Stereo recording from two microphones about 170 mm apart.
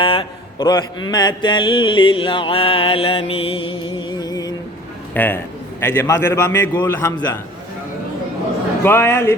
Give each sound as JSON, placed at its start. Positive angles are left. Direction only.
{"t": 0.0, "sound": "speech", "side_deg": 30}
{"t": 5.1, "sound": "a man's voice", "side_deg": 10}
{"t": 8.8, "sound": "a man's voice", "side_deg": 15}